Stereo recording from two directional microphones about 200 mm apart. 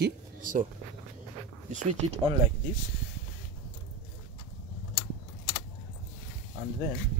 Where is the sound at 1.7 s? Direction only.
40° right (ahead or behind).